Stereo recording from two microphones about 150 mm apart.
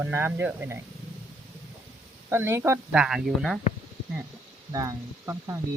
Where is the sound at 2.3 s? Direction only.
15° right (ahead or behind).